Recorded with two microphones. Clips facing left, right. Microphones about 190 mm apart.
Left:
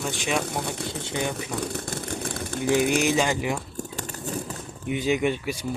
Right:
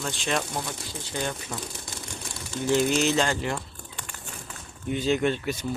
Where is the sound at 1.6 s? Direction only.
60° left (ahead or behind).